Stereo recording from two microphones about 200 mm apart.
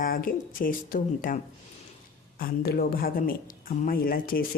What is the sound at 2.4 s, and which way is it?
A woman's voice, 50° left (ahead or behind).